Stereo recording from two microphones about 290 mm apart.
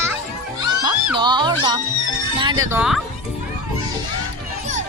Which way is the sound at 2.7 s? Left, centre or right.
Centre.